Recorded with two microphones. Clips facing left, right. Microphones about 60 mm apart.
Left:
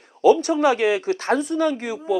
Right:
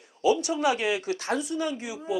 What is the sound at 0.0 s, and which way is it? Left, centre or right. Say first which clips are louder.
Speech: left 8 dB; left.